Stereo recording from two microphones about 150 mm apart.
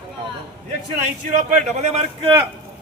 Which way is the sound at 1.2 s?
50° right (ahead or behind).